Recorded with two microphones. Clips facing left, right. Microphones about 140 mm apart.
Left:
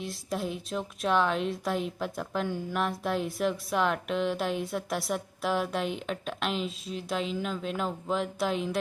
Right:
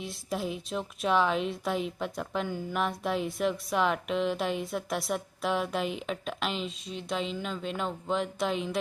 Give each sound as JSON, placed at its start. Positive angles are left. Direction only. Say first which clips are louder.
{"t": 0.0, "sound": "a woman's voice", "louder": "even", "side_deg": 0}